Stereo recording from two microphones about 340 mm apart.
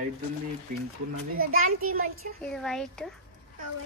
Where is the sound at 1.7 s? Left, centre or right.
Right.